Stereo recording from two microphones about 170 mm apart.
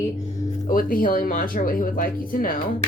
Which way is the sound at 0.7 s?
55° left (ahead or behind).